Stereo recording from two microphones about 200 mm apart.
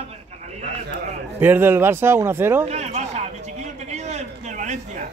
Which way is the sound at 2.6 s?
35° right (ahead or behind).